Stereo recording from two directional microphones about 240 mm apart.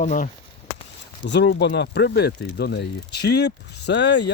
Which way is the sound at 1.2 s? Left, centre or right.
Left.